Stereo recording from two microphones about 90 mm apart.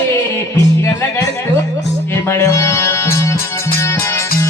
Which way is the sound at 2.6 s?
25° left (ahead or behind).